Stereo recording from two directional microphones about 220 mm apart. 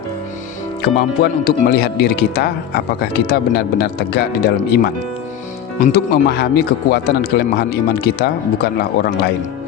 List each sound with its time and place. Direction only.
0.8 s speech: 45° left (ahead or behind)
5.9 s speech: 45° left (ahead or behind)